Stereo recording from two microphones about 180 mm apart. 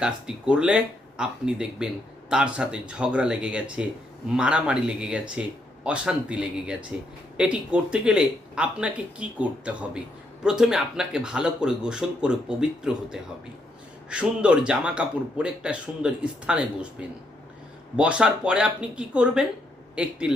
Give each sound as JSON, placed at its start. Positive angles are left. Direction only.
{"t": 0.0, "sound": "speech", "side_deg": -5}
{"t": 17.9, "sound": "speech", "side_deg": -5}